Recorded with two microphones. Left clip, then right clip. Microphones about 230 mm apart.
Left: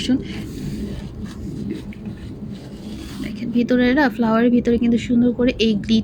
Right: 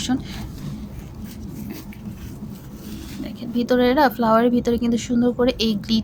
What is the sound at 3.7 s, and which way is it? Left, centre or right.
Speech, centre.